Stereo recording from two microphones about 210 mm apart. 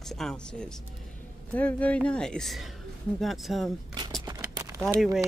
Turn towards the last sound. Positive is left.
turn(degrees=0)  # may be behind; listen again after turning